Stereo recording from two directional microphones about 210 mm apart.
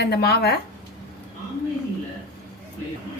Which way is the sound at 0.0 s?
50° left (ahead or behind).